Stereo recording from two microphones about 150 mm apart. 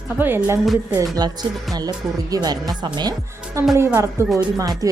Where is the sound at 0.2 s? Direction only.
15° right (ahead or behind).